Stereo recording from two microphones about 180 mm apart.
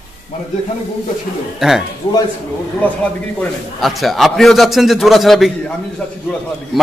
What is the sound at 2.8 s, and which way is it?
A man's voice, 5° left (ahead or behind).